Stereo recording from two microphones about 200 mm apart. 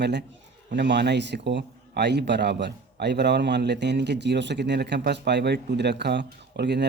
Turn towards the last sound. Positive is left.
turn(degrees=-55)  # may be behind; listen again after turning